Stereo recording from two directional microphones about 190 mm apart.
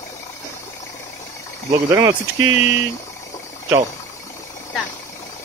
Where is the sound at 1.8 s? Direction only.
15° right (ahead or behind).